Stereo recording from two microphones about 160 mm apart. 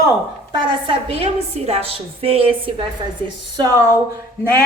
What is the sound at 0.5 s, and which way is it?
A woman's voice, 30° right (ahead or behind).